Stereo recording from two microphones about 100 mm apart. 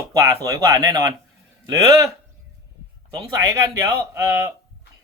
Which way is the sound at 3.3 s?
30° right (ahead or behind).